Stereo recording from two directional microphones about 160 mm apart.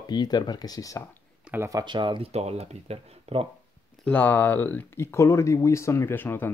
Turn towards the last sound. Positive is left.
turn(degrees=15)  # may be behind; listen again after turning